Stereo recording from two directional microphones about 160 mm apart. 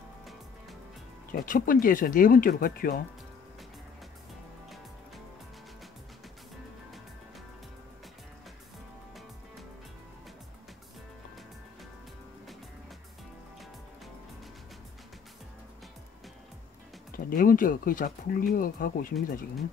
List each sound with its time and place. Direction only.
1.3 s speech: 60° left (ahead or behind)
17.2 s speech: 60° left (ahead or behind)